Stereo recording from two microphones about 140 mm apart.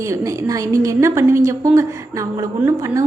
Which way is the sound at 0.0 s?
20° right (ahead or behind).